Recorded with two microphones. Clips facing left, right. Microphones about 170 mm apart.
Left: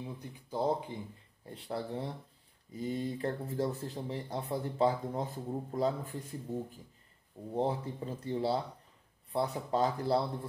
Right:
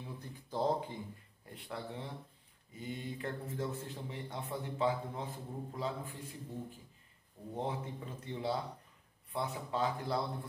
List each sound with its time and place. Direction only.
0.0 s speech: 15° left (ahead or behind)
1.4 s speech: 35° left (ahead or behind)
7.5 s speech: 35° left (ahead or behind)